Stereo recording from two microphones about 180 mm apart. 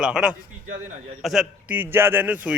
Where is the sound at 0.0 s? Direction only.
5° right (ahead or behind).